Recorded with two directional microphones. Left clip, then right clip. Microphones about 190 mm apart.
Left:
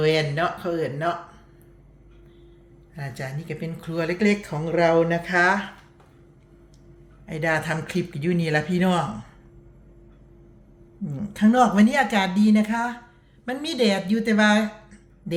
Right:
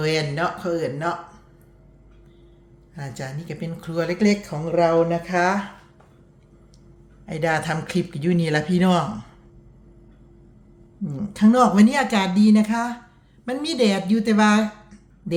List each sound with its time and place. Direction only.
0.0 s speech: 10° right (ahead or behind)
2.9 s speech: 10° right (ahead or behind)
5.3 s speech: 15° right (ahead or behind)
7.3 s speech: 15° right (ahead or behind)
11.0 s speech: 10° right (ahead or behind)